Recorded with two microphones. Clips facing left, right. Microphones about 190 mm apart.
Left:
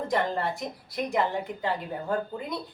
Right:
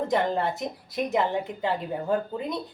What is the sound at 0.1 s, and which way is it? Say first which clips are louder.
Speech: even; 20° right (ahead or behind).